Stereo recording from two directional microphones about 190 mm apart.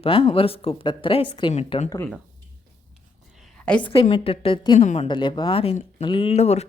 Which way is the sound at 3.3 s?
Centre (ahead or behind).